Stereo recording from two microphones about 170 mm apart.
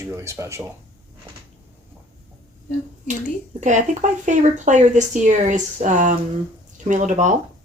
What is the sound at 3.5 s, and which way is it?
Speech, 45° right (ahead or behind).